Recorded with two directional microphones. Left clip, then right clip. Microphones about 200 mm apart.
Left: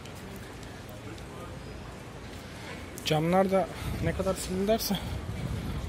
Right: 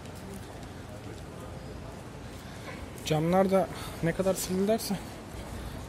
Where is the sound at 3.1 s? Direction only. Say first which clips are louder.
Even; 10° right (ahead or behind); by 4.5 s 30° right (ahead or behind).